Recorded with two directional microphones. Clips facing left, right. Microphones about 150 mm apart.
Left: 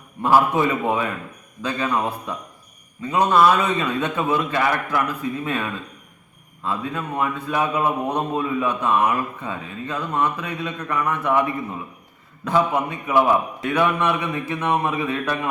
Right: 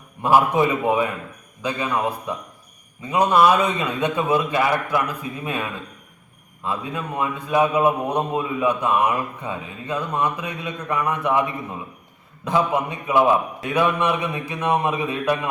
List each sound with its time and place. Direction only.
0.2 s a man's voice: 15° right (ahead or behind)
6.7 s a man's voice: 15° right (ahead or behind)
13.1 s a man's voice: 15° right (ahead or behind)